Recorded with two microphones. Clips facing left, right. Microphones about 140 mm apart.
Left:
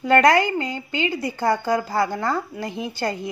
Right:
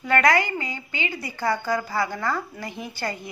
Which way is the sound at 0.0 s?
25° left (ahead or behind).